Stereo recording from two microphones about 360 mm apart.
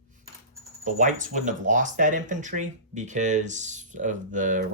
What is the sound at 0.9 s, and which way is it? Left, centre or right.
Speech, centre.